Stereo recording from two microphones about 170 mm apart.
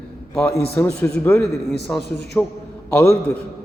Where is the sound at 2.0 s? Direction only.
70° left (ahead or behind).